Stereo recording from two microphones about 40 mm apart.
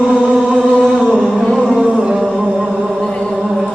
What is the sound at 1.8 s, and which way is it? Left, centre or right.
Music, right.